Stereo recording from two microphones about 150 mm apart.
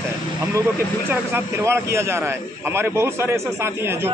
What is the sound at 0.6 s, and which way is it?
A man's voice, 15° right (ahead or behind).